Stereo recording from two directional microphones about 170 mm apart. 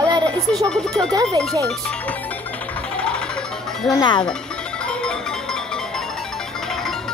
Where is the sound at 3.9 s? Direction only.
25° left (ahead or behind).